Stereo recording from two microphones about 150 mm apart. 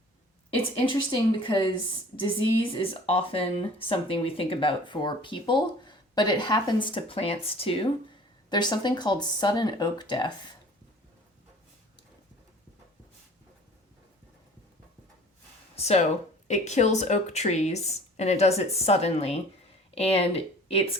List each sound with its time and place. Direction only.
0.5 s speech: 35° left (ahead or behind)
15.7 s speech: 45° left (ahead or behind)